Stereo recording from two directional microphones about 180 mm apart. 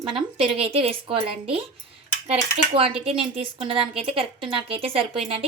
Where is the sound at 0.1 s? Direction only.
30° right (ahead or behind).